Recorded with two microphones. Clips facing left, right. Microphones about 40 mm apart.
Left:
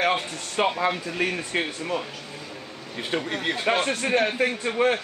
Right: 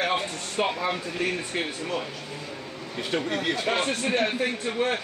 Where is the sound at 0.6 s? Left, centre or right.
Left.